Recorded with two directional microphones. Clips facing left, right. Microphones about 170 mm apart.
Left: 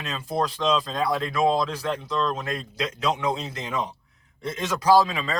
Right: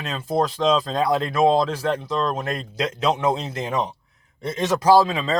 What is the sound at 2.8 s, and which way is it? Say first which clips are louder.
A man's voice: right 4 dB; 25° right (ahead or behind).